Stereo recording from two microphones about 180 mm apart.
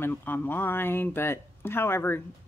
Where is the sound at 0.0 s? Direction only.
10° left (ahead or behind).